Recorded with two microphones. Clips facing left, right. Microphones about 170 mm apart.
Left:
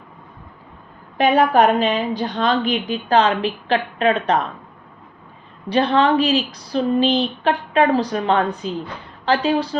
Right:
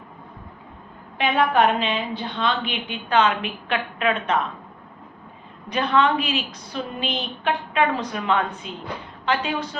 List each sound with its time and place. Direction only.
1.2 s a woman's voice: 40° left (ahead or behind)
5.6 s a woman's voice: 30° left (ahead or behind)